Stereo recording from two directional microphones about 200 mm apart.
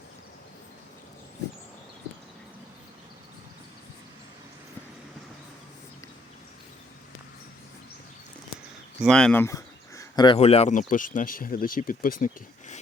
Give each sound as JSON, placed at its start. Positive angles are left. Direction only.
{"t": 9.0, "sound": "speech", "side_deg": 5}